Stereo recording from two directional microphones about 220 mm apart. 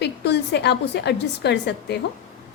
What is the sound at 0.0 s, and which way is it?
A woman's voice, 50° left (ahead or behind).